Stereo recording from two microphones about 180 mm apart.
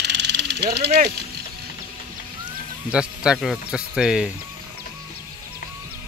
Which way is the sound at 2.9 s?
5° right (ahead or behind).